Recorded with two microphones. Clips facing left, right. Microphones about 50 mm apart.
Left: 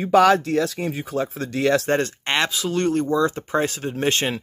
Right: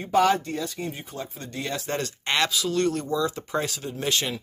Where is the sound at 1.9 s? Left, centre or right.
Left.